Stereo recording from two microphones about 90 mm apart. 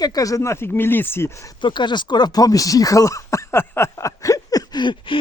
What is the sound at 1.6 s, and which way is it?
Speech, 60° left (ahead or behind).